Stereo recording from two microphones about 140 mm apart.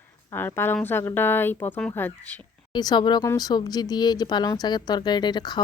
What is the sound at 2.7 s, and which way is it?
Speech, 30° left (ahead or behind).